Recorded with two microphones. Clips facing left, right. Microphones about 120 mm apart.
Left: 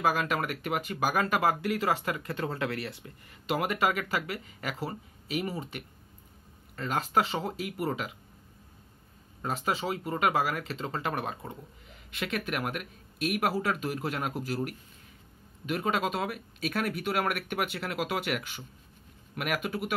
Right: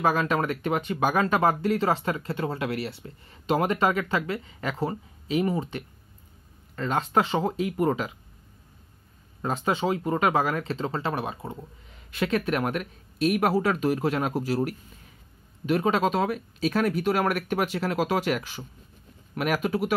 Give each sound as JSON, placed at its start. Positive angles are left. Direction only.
{"t": 0.0, "sound": "speech", "side_deg": -35}
{"t": 9.7, "sound": "speech", "side_deg": -35}